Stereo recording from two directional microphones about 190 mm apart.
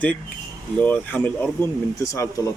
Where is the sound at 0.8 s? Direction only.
10° left (ahead or behind).